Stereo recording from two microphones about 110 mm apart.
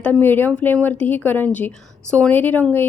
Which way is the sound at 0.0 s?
15° left (ahead or behind).